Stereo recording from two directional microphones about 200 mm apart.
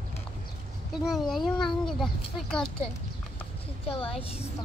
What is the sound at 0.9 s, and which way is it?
A woman's voice, centre (ahead or behind).